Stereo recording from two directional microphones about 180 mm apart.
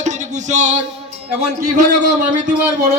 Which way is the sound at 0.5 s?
40° right (ahead or behind).